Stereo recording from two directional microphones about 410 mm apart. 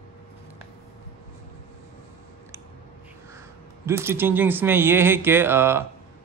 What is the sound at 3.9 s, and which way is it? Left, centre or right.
Speech, centre.